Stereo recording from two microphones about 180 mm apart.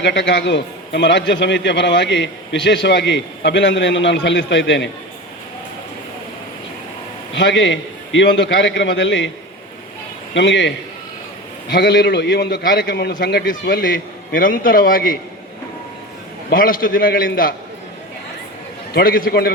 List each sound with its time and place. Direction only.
0.0 s a man's voice: 75° left (ahead or behind)
7.3 s a man's voice: 90° left
10.3 s a man's voice: 90° left
11.7 s a man's voice: 65° left (ahead or behind)
16.5 s a man's voice: 50° left (ahead or behind)
18.9 s a man's voice: 55° left (ahead or behind)